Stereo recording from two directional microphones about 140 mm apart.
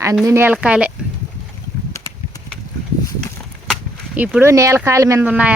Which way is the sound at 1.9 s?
20° left (ahead or behind).